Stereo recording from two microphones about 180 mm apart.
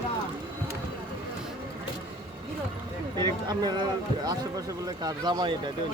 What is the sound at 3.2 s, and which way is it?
Speech, 25° right (ahead or behind).